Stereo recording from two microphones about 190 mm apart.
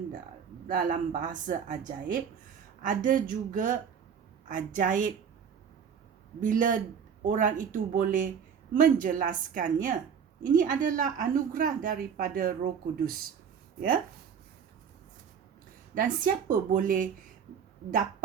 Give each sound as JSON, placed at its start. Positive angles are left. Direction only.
{"t": 0.7, "sound": "a woman's voice", "side_deg": -45}
{"t": 2.8, "sound": "a woman's voice", "side_deg": -45}
{"t": 6.4, "sound": "a woman's voice", "side_deg": -45}
{"t": 16.0, "sound": "a woman's voice", "side_deg": -45}